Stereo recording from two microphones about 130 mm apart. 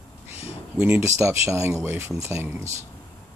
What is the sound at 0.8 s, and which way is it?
Speech, 15° right (ahead or behind).